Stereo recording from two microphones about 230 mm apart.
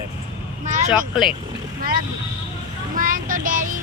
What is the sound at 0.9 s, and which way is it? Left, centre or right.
Speech, centre.